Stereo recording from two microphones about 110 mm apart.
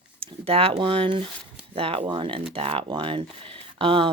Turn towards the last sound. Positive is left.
turn(degrees=-55)  # may be behind; listen again after turning